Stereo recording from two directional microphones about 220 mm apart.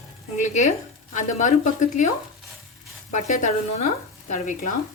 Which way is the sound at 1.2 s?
35° left (ahead or behind).